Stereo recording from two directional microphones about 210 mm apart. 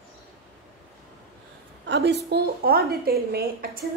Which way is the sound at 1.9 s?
55° right (ahead or behind).